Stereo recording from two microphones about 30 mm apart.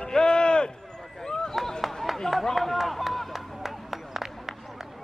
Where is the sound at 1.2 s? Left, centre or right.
Left.